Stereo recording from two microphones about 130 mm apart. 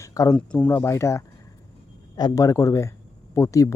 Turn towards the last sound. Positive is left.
turn(degrees=25)  # may be behind; listen again after turning